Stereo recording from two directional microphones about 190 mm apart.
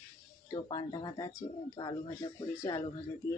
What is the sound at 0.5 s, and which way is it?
Speech, 20° left (ahead or behind).